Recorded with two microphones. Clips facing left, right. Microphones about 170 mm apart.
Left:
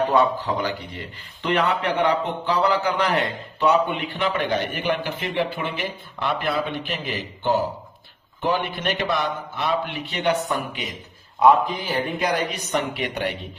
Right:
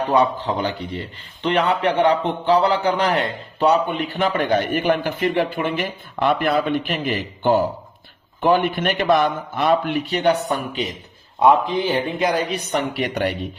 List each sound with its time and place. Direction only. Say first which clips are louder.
0.1 s a man's voice: right 2 dB; 20° right (ahead or behind)
4.7 s speech: right 5 dB; 45° right (ahead or behind)
11.3 s a man's voice: right 1 dB; 25° right (ahead or behind)